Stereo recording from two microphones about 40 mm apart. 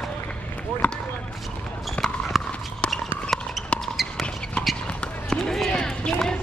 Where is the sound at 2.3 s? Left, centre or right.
Centre.